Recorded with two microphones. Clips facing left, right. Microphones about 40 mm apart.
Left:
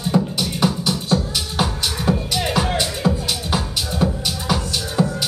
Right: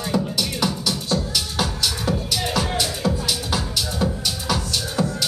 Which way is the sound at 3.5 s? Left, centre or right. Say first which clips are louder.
Left 2 dB; centre.